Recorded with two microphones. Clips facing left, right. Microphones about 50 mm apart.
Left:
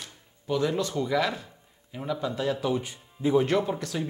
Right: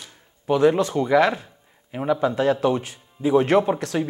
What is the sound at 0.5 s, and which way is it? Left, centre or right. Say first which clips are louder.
Speech: right 9 dB; right.